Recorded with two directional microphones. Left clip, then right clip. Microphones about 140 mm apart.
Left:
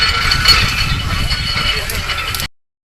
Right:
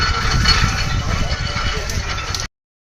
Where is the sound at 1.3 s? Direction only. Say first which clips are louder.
Left 10 dB; 90° right.